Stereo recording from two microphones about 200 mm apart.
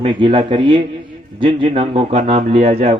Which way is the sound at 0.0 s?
25° right (ahead or behind).